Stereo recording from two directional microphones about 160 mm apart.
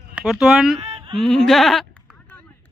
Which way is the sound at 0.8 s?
40° right (ahead or behind).